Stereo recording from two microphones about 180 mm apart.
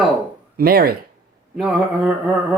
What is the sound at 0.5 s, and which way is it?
Speech, 60° right (ahead or behind).